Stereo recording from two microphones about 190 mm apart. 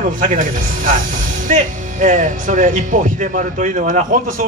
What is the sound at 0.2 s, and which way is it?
Speech, 45° right (ahead or behind).